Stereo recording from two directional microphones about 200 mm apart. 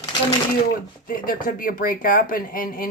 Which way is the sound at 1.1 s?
45° left (ahead or behind).